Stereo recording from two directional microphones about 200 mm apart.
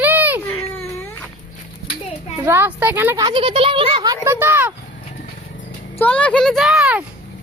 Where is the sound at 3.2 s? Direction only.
25° right (ahead or behind).